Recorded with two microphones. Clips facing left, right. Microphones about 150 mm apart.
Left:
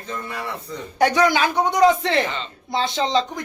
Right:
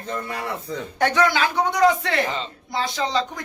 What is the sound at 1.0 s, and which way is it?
Speech, 15° left (ahead or behind).